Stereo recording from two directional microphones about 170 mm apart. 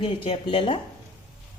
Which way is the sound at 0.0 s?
35° left (ahead or behind).